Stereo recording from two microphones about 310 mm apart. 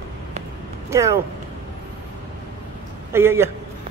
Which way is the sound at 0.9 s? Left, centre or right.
Centre.